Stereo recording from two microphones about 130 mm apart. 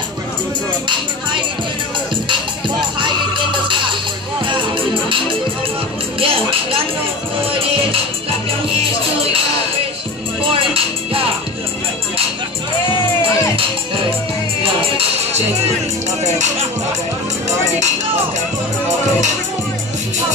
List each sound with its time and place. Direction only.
3.0 s music: 40° right (ahead or behind)
10.5 s music: 45° right (ahead or behind)